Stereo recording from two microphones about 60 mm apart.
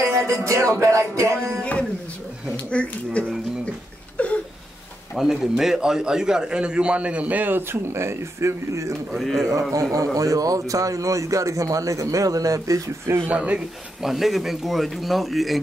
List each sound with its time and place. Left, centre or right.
0.0 s music: right
1.6 s a sound: centre
2.7 s speech: centre
4.2 s a sound: left
5.1 s a man's voice: centre; by 8.9 s right
9.1 s speech: centre
9.5 s a man's voice: right
9.9 s speech: right
13.3 s speech: centre
14.0 s speech: centre